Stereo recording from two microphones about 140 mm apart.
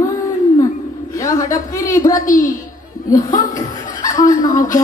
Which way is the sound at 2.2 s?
75° left (ahead or behind).